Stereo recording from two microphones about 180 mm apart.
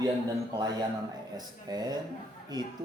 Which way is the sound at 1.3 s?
20° right (ahead or behind).